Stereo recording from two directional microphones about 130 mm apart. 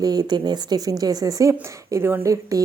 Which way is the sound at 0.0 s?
30° right (ahead or behind).